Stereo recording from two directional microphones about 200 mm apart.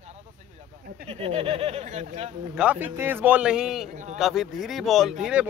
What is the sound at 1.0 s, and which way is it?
Speech, 30° right (ahead or behind).